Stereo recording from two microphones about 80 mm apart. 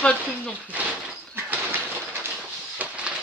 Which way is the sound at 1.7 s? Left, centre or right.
Right.